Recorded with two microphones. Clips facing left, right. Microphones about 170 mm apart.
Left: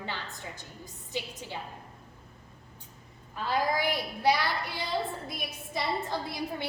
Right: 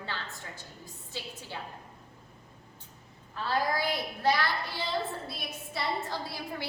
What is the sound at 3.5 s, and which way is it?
A woman's voice, 15° left (ahead or behind).